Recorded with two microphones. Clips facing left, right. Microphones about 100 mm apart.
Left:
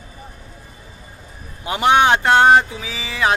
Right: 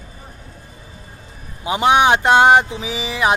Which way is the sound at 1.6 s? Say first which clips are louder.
Even; 20° right (ahead or behind).